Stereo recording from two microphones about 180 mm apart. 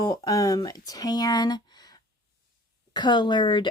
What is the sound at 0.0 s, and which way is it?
Speech, 20° left (ahead or behind).